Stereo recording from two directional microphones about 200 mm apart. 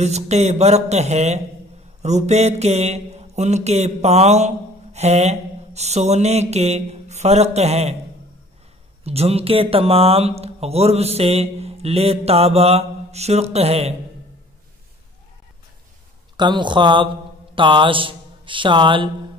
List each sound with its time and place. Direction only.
0.0 s speech: 35° right (ahead or behind)
4.9 s mantra: 30° right (ahead or behind)
9.0 s speech: 30° right (ahead or behind)
16.3 s speech: 20° right (ahead or behind)